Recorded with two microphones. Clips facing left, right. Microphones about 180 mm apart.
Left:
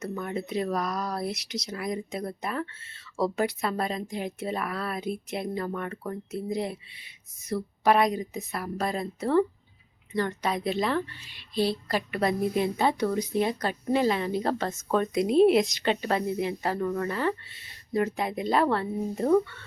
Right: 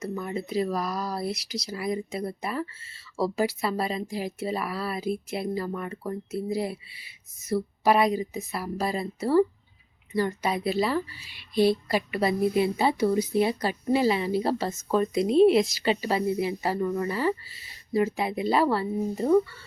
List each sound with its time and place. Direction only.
0.0 s a woman's voice: centre (ahead or behind)